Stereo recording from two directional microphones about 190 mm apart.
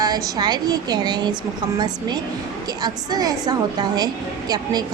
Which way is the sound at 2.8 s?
20° right (ahead or behind).